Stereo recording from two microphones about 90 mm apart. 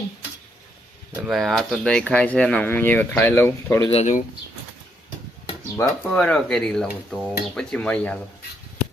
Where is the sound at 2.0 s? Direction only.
15° left (ahead or behind).